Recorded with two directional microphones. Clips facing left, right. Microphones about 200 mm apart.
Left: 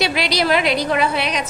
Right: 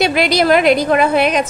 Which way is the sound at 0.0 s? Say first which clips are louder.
Right 6 dB; 50° right (ahead or behind).